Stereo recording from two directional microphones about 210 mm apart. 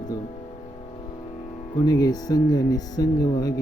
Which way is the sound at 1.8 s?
20° left (ahead or behind).